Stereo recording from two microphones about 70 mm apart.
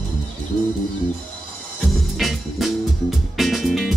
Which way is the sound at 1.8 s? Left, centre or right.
Centre.